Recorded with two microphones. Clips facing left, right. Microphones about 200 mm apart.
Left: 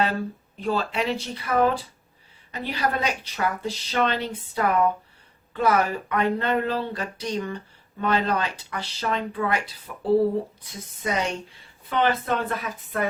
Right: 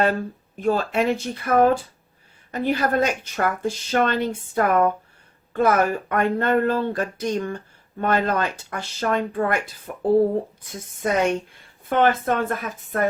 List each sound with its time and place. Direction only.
0.5 s a woman's voice: 50° right (ahead or behind)